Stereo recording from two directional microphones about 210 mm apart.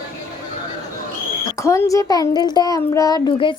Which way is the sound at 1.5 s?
15° left (ahead or behind).